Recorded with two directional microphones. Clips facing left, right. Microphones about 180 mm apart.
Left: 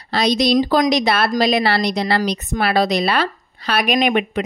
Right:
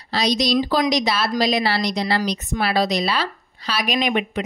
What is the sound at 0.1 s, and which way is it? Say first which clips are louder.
A woman's voice: left 4 dB; 55° left (ahead or behind).